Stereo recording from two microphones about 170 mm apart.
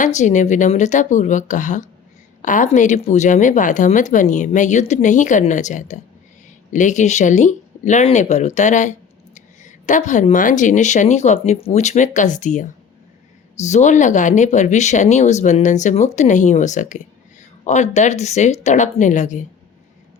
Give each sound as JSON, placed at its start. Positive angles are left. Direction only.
{"t": 0.0, "sound": "a woman's voice", "side_deg": 45}